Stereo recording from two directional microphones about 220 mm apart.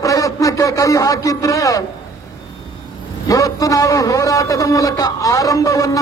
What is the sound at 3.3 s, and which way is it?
A man's voice, 15° left (ahead or behind).